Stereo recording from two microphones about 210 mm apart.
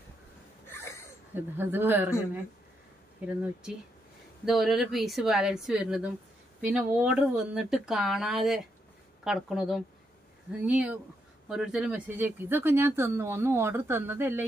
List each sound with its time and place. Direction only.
0.7 s snort: 10° left (ahead or behind)
1.3 s speech: 10° right (ahead or behind)
3.2 s speech: 5° right (ahead or behind)
4.5 s speech: centre (ahead or behind)